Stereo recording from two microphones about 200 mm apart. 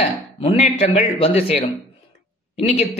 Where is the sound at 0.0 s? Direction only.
30° left (ahead or behind).